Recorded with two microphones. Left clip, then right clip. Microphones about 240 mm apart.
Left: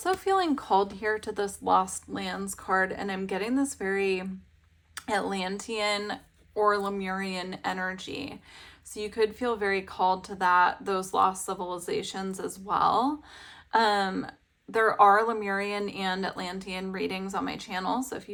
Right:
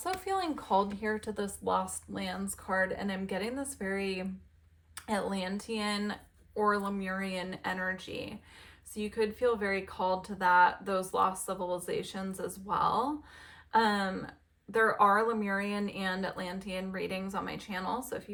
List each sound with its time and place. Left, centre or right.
0.0 s speech: left